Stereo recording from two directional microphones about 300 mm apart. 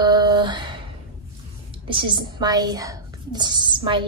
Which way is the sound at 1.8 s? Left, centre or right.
Centre.